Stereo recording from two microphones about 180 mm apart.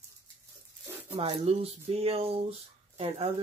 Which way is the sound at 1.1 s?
35° right (ahead or behind).